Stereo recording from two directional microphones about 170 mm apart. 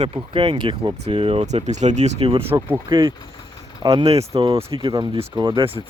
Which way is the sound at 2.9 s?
25° right (ahead or behind).